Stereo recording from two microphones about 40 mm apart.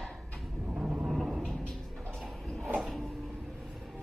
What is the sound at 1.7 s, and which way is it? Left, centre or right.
Music, centre.